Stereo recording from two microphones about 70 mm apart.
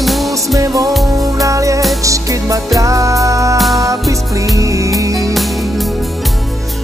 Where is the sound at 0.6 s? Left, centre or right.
Right.